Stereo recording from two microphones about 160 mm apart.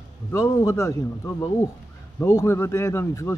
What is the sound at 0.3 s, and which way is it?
Speech, 20° left (ahead or behind).